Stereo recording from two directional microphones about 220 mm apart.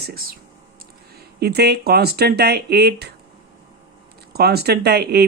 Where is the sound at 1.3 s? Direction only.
45° right (ahead or behind).